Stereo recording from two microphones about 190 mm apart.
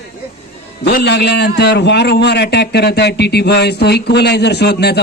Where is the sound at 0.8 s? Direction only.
55° left (ahead or behind).